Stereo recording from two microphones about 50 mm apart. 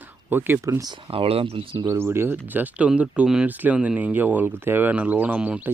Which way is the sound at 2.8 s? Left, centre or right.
Right.